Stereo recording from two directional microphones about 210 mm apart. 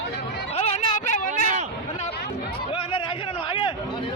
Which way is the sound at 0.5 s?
30° left (ahead or behind).